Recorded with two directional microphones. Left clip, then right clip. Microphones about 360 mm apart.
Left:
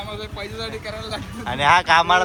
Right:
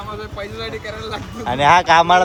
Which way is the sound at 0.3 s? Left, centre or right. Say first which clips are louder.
Right 3 dB; centre.